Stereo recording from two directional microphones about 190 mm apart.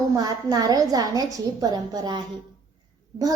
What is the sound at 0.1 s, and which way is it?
A child's voice, 20° right (ahead or behind).